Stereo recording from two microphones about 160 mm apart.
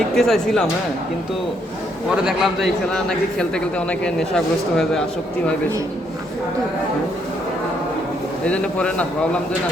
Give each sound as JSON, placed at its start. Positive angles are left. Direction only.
{"t": 0.2, "sound": "a man's voice", "side_deg": 0}
{"t": 2.0, "sound": "a man's voice", "side_deg": 0}
{"t": 8.4, "sound": "speech", "side_deg": 5}